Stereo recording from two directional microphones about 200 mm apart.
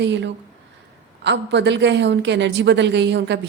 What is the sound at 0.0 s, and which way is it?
A woman's voice, 60° right (ahead or behind).